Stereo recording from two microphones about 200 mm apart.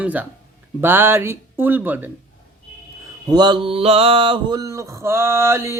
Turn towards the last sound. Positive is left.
turn(degrees=-10)  # may be behind; listen again after turning